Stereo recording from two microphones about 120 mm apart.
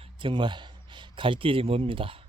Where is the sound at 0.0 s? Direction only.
45° right (ahead or behind).